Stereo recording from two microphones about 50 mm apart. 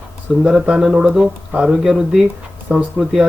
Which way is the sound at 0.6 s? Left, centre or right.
Centre.